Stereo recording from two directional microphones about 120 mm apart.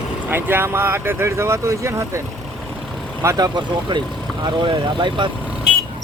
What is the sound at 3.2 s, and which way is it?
Speech, 25° right (ahead or behind).